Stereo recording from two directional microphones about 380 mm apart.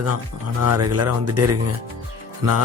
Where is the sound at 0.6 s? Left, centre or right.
Right.